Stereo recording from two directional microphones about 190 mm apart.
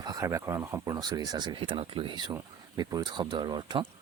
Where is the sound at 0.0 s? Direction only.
20° right (ahead or behind).